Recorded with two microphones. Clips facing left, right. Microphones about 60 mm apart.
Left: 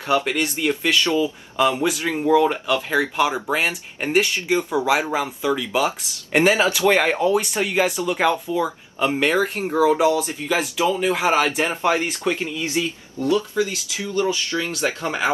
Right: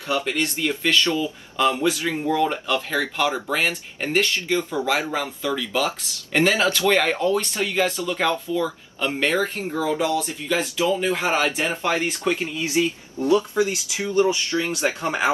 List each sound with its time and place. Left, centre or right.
0.0 s speech: left
0.3 s speech: centre
11.6 s speech: left
12.7 s speech: right